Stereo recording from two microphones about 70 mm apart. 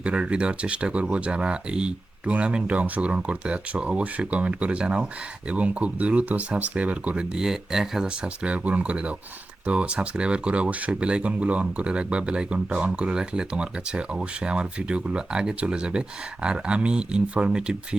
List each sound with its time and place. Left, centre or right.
0.0 s speech: centre
7.3 s speech: centre